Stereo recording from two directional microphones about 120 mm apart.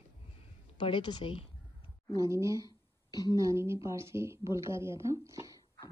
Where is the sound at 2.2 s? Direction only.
25° right (ahead or behind).